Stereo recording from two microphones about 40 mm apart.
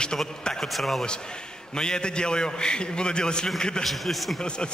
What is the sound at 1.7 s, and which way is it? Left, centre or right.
A woman's voice, centre.